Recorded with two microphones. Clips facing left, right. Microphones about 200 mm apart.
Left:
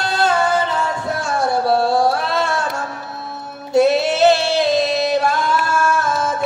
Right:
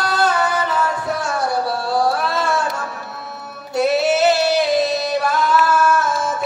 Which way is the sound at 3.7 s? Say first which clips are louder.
Left 2 dB; 25° left (ahead or behind).